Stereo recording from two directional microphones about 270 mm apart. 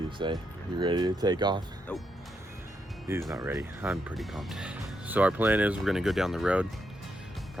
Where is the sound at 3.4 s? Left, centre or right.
Centre.